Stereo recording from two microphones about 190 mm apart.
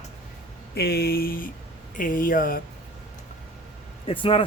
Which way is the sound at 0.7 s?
55° left (ahead or behind).